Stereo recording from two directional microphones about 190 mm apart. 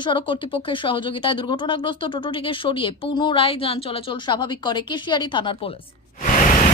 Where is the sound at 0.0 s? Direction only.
25° left (ahead or behind).